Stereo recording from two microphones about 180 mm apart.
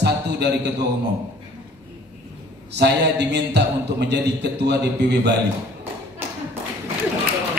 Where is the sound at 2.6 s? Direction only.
70° right (ahead or behind).